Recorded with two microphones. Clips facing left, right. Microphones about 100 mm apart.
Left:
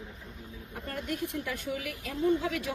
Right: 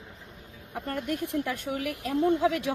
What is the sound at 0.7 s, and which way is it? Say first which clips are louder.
Speech: right 5 dB; 50° right (ahead or behind).